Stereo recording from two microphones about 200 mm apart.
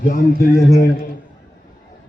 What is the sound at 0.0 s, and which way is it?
Speech, 45° left (ahead or behind).